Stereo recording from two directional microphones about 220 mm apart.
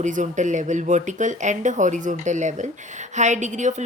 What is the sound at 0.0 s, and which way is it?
Speech, 35° right (ahead or behind).